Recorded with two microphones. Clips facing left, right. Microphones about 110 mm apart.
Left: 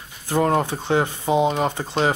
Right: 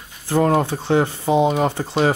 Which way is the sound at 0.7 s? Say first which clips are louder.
Right 3 dB; 15° left (ahead or behind).